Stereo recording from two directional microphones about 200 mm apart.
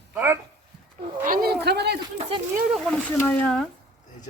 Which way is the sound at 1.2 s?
45° right (ahead or behind).